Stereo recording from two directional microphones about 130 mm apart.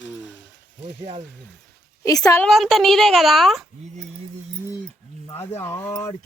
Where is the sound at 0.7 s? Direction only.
70° right (ahead or behind).